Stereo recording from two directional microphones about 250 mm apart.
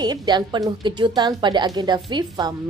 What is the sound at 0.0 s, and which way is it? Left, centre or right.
A woman's voice, centre.